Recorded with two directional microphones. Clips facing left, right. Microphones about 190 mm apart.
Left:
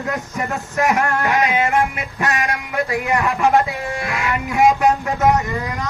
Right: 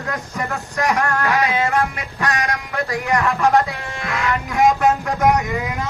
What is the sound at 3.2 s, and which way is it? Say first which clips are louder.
Speech: even; 15° left (ahead or behind).